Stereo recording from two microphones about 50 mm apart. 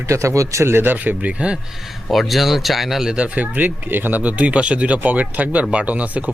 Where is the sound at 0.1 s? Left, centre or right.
Right.